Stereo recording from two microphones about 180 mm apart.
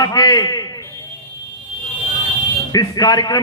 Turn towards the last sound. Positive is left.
turn(degrees=20)  # may be behind; listen again after turning